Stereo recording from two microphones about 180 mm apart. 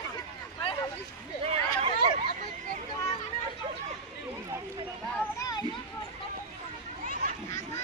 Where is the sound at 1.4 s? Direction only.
35° right (ahead or behind).